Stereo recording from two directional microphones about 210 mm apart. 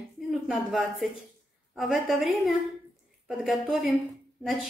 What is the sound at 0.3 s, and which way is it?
A woman's voice, centre (ahead or behind).